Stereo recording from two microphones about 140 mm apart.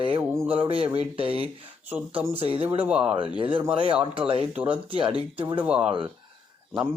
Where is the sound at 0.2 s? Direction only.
20° right (ahead or behind).